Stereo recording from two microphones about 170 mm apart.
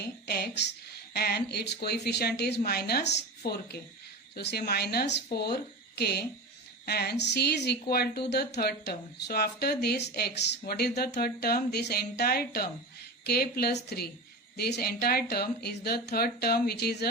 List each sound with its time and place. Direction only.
0.3 s a woman's voice: 75° left (ahead or behind)
1.1 s speech: 65° left (ahead or behind)
1.5 s speech: 75° left (ahead or behind)
4.7 s speech: 65° left (ahead or behind)